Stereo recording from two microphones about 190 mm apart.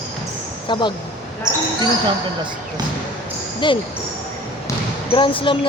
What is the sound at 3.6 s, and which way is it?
Speech, 25° left (ahead or behind).